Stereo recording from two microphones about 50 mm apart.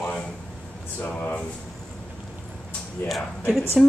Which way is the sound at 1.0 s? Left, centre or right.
Left.